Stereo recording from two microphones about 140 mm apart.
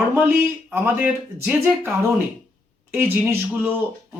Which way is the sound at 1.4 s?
15° right (ahead or behind).